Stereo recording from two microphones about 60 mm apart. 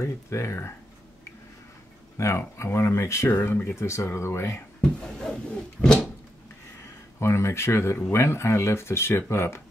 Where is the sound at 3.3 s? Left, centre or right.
Left.